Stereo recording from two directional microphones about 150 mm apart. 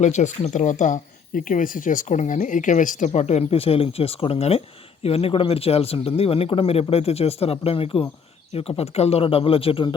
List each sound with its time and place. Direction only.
0.0 s speech: 50° left (ahead or behind); by 9.9 s 35° left (ahead or behind)